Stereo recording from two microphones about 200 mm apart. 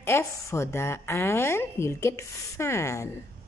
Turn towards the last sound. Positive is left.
turn(degrees=15)  # may be behind; listen again after turning